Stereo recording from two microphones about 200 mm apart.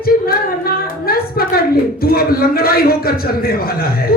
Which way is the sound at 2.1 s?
50° left (ahead or behind).